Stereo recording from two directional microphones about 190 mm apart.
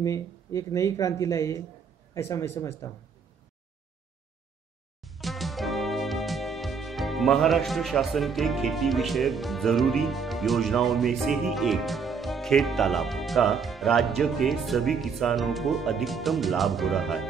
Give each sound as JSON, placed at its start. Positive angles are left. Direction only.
{"t": 0.0, "sound": "speech", "side_deg": 15}
{"t": 5.0, "sound": "music", "side_deg": 0}